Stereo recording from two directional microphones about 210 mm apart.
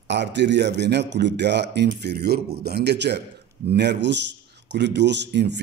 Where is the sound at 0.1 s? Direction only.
55° right (ahead or behind).